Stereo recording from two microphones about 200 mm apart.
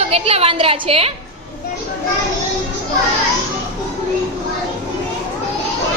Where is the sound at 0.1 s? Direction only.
30° right (ahead or behind).